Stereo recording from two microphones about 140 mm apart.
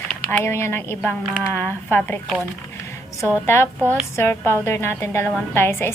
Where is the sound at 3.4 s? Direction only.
15° left (ahead or behind).